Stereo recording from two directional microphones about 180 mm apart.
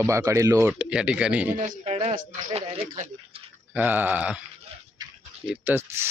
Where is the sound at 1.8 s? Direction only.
35° right (ahead or behind).